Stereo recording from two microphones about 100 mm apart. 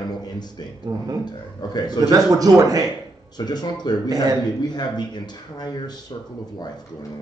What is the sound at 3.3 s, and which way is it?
Speech, 45° left (ahead or behind).